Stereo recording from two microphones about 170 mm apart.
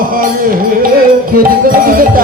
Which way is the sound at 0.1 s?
55° right (ahead or behind).